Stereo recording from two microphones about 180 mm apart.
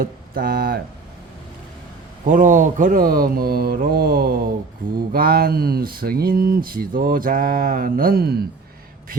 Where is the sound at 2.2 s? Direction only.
45° right (ahead or behind).